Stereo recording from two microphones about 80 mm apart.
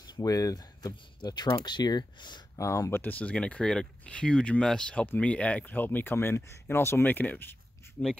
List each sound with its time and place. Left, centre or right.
0.2 s speech: left
2.5 s speech: left
3.0 s speech: centre